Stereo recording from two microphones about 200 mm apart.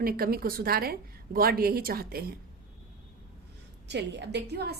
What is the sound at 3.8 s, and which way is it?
Speech, 60° right (ahead or behind).